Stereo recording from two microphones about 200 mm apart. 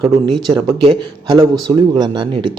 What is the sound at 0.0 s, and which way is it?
A man's voice, 20° right (ahead or behind).